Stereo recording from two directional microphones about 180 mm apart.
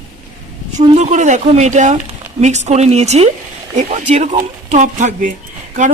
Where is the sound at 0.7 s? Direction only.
40° right (ahead or behind).